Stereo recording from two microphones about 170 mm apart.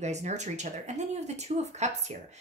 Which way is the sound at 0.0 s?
40° right (ahead or behind).